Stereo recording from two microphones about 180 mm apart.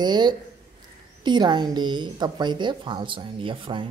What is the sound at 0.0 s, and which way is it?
A woman's voice, 25° right (ahead or behind).